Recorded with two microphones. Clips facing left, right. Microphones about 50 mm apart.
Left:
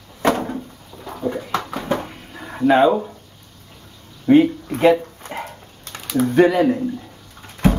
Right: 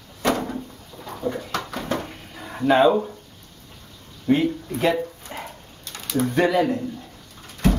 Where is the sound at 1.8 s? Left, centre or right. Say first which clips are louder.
Left 4 dB; centre.